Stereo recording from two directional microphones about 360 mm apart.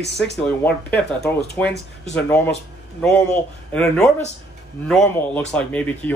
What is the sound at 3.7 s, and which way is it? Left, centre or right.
Speech, centre.